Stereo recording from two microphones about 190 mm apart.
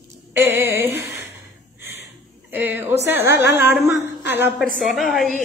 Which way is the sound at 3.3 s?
65° left (ahead or behind).